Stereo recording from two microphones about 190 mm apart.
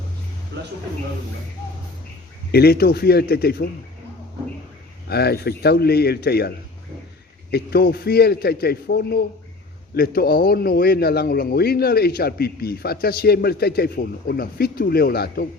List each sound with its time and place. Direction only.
0.5 s a sound: 60° right (ahead or behind)
2.5 s a man's voice: 55° left (ahead or behind)
5.0 s a man's voice: 55° left (ahead or behind)
7.5 s a man's voice: 55° left (ahead or behind)